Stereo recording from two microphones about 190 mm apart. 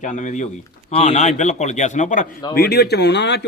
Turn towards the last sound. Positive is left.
turn(degrees=65)  # may be behind; listen again after turning